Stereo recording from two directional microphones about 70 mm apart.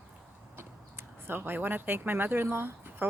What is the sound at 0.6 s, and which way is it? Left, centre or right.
Speech, right.